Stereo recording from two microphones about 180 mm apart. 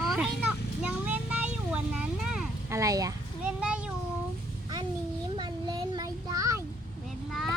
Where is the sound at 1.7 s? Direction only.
5° right (ahead or behind).